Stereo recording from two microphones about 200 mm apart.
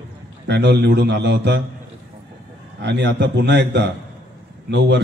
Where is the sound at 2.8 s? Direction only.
60° right (ahead or behind).